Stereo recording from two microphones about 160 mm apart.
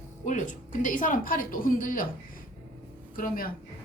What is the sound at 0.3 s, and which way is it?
A woman's voice, 50° left (ahead or behind).